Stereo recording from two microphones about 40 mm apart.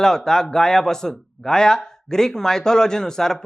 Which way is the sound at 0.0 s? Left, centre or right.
Centre.